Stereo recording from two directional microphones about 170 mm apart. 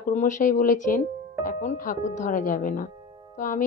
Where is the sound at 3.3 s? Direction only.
50° left (ahead or behind).